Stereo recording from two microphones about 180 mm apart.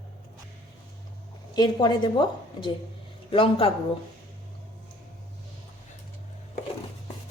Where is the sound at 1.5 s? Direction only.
25° left (ahead or behind).